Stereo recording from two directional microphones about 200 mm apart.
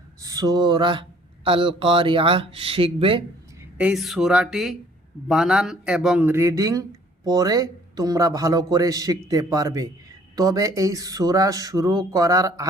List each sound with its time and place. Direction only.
0.2 s a sound: 15° right (ahead or behind)
1.5 s speech: 25° right (ahead or behind)
3.8 s a man's voice: 5° right (ahead or behind)